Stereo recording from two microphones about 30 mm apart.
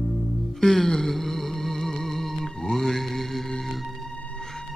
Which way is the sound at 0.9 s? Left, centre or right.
Centre.